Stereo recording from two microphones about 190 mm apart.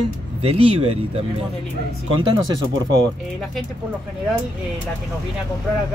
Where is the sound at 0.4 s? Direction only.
30° right (ahead or behind).